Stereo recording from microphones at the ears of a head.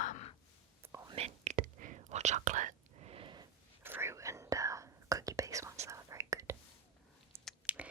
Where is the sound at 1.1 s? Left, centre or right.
Right.